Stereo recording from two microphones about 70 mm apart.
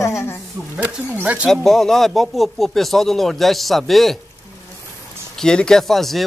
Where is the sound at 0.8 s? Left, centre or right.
Right.